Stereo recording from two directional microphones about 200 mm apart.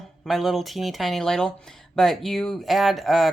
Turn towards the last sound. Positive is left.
turn(degrees=0)  # may be behind; listen again after turning